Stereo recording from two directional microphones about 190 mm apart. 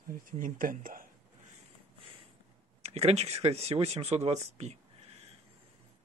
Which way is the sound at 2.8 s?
35° right (ahead or behind).